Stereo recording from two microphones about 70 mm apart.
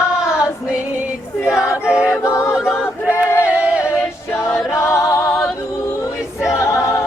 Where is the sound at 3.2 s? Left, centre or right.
Left.